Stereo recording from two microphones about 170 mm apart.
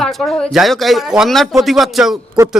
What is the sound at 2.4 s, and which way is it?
Speech, 20° right (ahead or behind).